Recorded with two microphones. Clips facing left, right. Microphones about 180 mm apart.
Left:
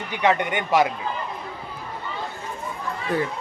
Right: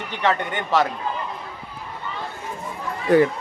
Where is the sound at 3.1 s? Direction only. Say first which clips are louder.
Right 9 dB; 75° right (ahead or behind).